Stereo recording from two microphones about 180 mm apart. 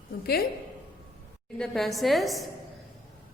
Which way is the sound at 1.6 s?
Centre (ahead or behind).